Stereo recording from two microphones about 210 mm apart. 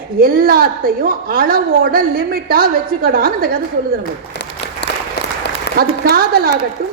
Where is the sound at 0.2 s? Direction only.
45° right (ahead or behind).